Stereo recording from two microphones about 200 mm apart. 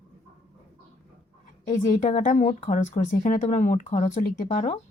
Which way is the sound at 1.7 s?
40° left (ahead or behind).